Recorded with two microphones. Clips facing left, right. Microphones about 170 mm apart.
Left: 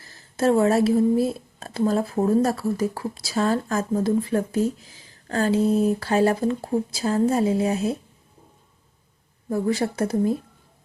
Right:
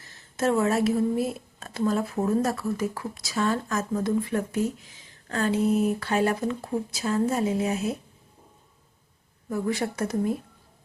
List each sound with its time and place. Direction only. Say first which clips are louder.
0.0 s speech: left 4 dB; 35° left (ahead or behind)
9.5 s speech: left 4 dB; 35° left (ahead or behind)